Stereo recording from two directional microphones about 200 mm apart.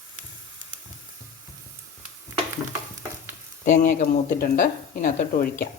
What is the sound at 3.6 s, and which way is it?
Speech, 40° left (ahead or behind).